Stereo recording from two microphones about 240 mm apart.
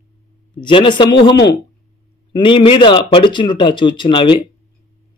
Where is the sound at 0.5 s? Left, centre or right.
Centre.